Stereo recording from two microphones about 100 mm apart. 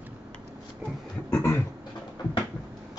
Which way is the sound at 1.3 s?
25° left (ahead or behind).